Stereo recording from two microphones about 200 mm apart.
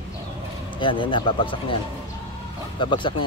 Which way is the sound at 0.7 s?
25° left (ahead or behind).